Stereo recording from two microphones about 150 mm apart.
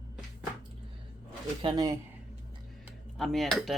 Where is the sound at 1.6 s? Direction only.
30° right (ahead or behind).